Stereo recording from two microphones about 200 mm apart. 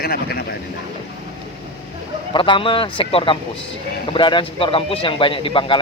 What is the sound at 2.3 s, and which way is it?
Speech, 25° left (ahead or behind).